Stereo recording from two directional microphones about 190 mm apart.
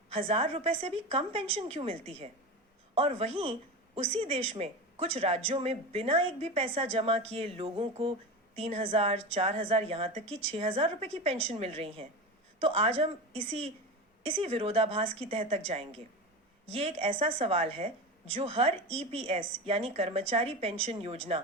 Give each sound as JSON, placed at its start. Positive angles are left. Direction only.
{"t": 0.1, "sound": "speech", "side_deg": -30}